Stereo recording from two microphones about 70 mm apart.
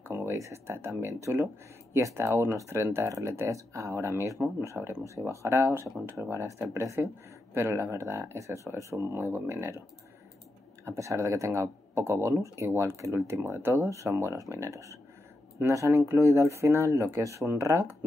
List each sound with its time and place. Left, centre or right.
0.1 s speech: right
10.9 s speech: right
13.7 s speech: right
15.9 s speech: right
17.2 s speech: right